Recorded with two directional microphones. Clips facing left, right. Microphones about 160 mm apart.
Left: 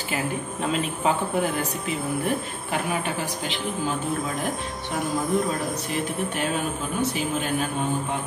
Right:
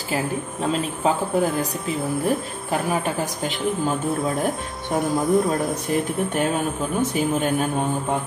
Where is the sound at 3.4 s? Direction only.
45° right (ahead or behind).